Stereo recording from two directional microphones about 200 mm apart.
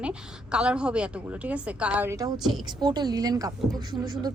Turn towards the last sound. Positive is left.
turn(degrees=-20)  # may be behind; listen again after turning